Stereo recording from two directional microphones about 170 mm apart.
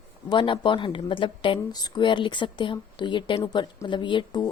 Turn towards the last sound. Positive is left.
turn(degrees=25)  # may be behind; listen again after turning